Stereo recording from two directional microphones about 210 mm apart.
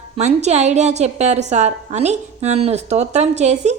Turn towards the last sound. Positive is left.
turn(degrees=-35)  # may be behind; listen again after turning